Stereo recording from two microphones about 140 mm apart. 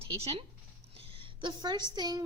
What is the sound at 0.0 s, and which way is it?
A woman's voice, 40° right (ahead or behind).